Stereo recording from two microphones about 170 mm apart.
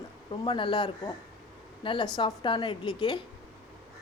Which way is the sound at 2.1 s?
25° left (ahead or behind).